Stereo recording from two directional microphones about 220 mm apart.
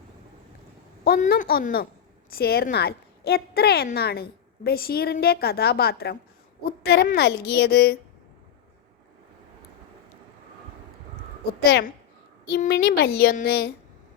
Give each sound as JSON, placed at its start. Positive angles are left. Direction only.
{"t": 1.0, "sound": "a woman's voice", "side_deg": 40}
{"t": 11.6, "sound": "a woman's voice", "side_deg": 50}